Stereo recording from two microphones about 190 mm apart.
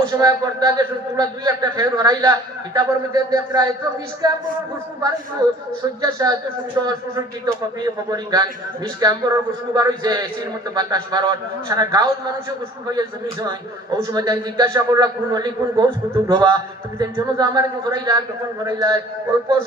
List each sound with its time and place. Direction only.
0.0 s a man's voice: 20° right (ahead or behind)
5.4 s a woman's voice: 20° right (ahead or behind)
13.4 s a man's voice: 20° right (ahead or behind)